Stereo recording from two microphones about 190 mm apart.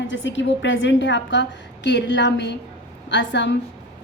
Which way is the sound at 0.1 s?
75° left (ahead or behind).